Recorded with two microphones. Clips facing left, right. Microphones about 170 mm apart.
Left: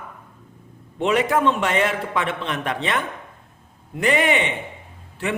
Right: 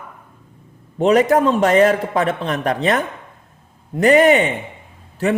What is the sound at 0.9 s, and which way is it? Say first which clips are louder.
A man's voice: right 6 dB; 40° right (ahead or behind).